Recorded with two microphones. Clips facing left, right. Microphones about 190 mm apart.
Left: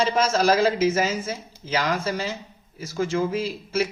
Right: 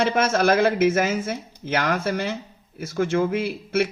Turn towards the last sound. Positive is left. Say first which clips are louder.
# right 2 dB
turn(degrees=-60)  # may be behind; listen again after turning